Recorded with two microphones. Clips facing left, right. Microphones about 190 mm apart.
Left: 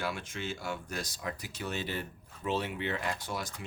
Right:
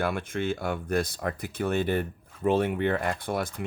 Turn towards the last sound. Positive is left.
turn(degrees=-55)  # may be behind; listen again after turning